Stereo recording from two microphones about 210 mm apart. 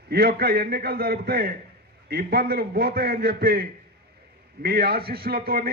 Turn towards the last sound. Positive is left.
turn(degrees=-45)  # may be behind; listen again after turning